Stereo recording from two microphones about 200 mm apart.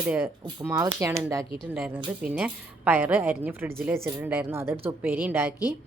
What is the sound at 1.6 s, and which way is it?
Speech, 5° right (ahead or behind).